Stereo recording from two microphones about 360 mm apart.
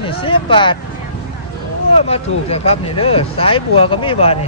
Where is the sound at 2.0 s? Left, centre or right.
Centre.